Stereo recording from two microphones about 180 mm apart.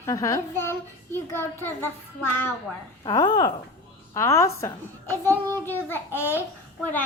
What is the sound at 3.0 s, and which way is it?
A woman's voice, 25° left (ahead or behind).